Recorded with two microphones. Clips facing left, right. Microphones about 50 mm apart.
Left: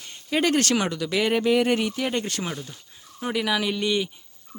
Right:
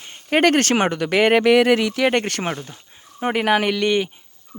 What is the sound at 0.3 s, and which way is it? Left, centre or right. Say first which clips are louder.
Speech: right 6 dB; right.